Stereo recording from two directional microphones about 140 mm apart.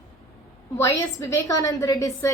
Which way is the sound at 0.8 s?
20° left (ahead or behind).